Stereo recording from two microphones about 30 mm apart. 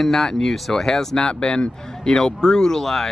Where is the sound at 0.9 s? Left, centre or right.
Left.